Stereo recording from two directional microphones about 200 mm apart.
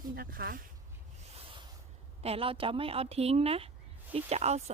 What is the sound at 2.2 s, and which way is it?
A woman's voice, 30° right (ahead or behind).